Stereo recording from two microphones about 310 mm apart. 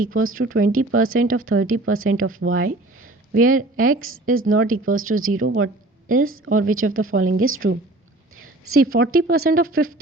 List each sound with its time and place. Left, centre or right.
0.1 s speech: right
3.5 s speech: right
4.4 s speech: right
6.1 s speech: right
6.3 s speech: right
9.0 s speech: right
9.6 s speech: right